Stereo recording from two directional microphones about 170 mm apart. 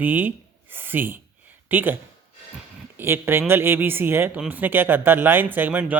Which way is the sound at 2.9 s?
10° right (ahead or behind).